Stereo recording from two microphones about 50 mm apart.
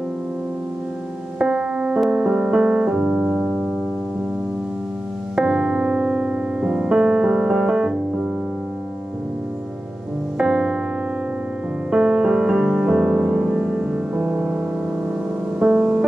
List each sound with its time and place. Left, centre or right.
1.4 s piano: centre
3.1 s keyboard: centre
5.3 s music: centre
10.3 s music: centre
11.9 s music: centre
15.6 s music: right